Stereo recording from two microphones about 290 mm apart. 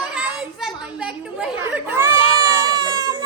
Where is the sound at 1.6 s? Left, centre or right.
Centre.